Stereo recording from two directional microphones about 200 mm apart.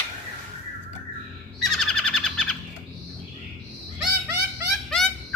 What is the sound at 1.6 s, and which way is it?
Bird, centre (ahead or behind).